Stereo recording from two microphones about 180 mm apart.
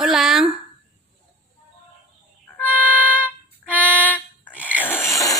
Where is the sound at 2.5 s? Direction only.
10° left (ahead or behind).